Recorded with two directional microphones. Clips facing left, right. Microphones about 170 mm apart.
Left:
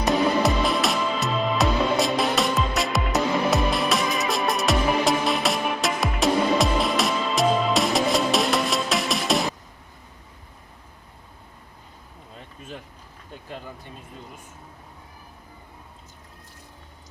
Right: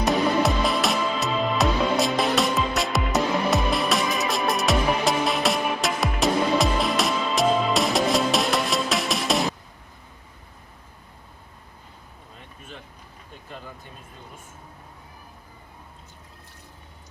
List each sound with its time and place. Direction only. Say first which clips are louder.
0.0 s music: left 1 dB; centre (ahead or behind)